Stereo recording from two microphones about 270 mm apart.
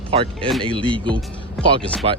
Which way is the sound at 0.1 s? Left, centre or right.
Right.